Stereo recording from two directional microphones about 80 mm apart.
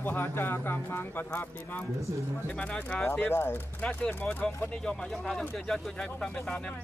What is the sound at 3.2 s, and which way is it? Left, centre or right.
Speech, left.